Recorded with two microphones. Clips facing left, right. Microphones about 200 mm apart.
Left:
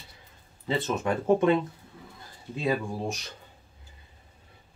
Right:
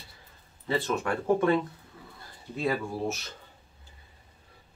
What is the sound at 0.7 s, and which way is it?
Speech, 20° left (ahead or behind).